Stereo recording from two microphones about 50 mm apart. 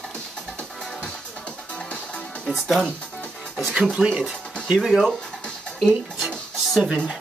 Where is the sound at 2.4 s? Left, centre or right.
Centre.